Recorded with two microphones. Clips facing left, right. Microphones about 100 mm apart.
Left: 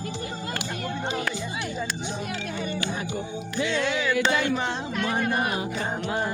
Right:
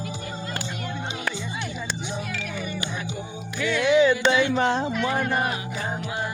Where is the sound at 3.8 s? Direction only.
15° right (ahead or behind).